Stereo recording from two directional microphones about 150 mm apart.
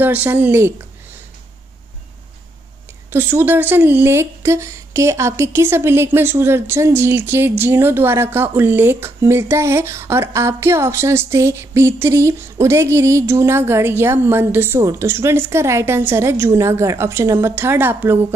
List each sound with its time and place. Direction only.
0.0 s speech: 10° right (ahead or behind)
3.1 s speech: 15° right (ahead or behind)